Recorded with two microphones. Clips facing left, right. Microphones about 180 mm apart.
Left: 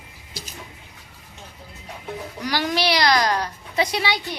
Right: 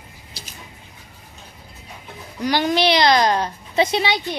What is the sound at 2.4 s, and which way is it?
A child's voice, 25° right (ahead or behind).